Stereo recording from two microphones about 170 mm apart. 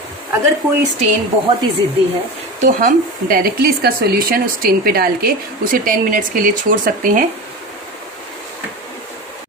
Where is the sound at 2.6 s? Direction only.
55° right (ahead or behind).